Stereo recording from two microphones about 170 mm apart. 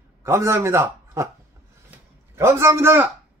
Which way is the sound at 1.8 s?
15° right (ahead or behind).